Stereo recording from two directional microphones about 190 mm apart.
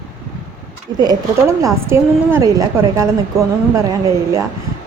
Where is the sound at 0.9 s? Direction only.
20° right (ahead or behind).